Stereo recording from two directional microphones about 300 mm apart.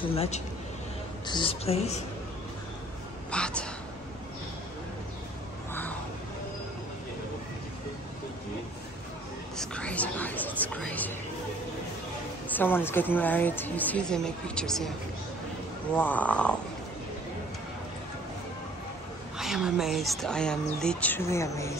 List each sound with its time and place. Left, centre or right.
0.1 s a woman's voice: centre
3.3 s whispering: centre
5.7 s a sound: centre
9.6 s whispering: centre
12.4 s a woman's voice: centre
16.0 s a woman's voice: centre
19.3 s a woman's voice: centre